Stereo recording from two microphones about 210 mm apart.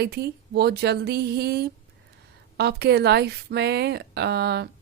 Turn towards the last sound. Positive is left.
turn(degrees=-50)  # may be behind; listen again after turning